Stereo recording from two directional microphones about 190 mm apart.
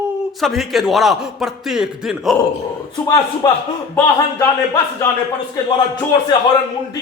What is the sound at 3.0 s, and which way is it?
Speech, 20° left (ahead or behind).